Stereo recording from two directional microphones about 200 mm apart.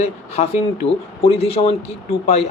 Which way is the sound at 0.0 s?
30° left (ahead or behind).